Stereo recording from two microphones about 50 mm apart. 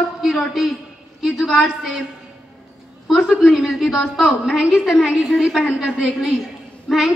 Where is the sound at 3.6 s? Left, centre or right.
Centre.